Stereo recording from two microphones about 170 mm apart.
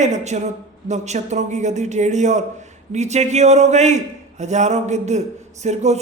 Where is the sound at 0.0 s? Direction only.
45° right (ahead or behind).